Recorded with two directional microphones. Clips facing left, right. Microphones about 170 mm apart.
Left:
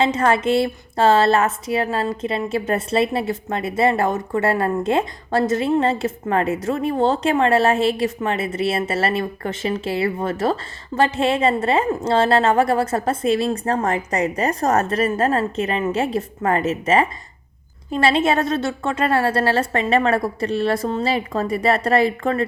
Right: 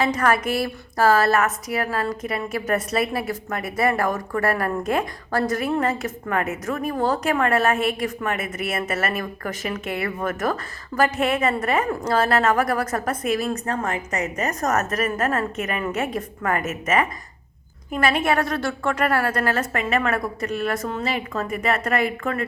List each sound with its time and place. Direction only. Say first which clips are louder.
0.0 s a woman's voice: left 3 dB; 25° left (ahead or behind)